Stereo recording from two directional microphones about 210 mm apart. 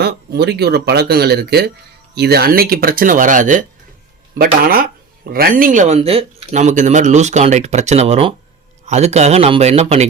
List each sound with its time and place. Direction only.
0.0 s speech: 50° right (ahead or behind); by 10.1 s 30° right (ahead or behind)